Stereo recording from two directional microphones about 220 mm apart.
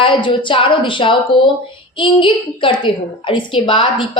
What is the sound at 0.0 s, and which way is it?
A woman's voice, 20° left (ahead or behind).